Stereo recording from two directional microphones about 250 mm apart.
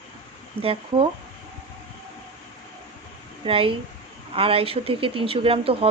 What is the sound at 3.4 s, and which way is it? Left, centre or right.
Speech, right.